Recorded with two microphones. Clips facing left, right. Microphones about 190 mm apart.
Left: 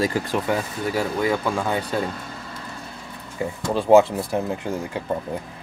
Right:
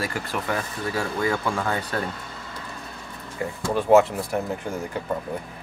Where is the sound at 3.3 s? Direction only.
20° left (ahead or behind).